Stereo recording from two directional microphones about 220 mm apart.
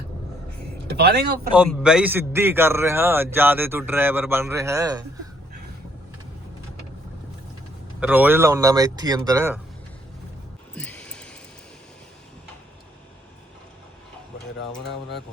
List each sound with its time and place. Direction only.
0.9 s speech: 45° right (ahead or behind)
1.5 s a man's voice: 5° right (ahead or behind)
8.0 s a man's voice: 10° right (ahead or behind)
10.8 s a sound: 5° left (ahead or behind)